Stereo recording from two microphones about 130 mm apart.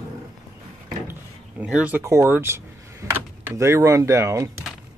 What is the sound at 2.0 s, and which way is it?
Speech, 20° right (ahead or behind).